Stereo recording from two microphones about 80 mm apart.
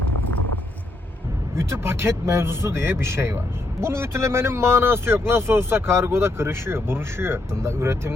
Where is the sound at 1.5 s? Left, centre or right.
Right.